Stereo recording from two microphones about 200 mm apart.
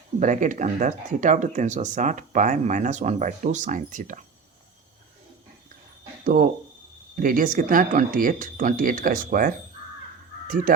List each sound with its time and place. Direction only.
0.2 s speech: 40° right (ahead or behind)
6.2 s speech: 40° right (ahead or behind)